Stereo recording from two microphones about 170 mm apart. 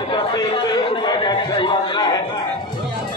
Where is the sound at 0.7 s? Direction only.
25° left (ahead or behind).